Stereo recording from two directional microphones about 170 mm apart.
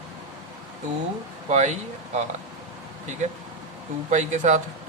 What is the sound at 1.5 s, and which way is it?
Speech, 45° right (ahead or behind).